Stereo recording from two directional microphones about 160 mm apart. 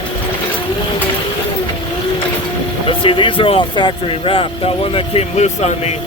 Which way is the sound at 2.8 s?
35° left (ahead or behind).